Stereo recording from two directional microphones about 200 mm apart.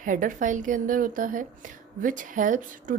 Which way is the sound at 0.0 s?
40° right (ahead or behind).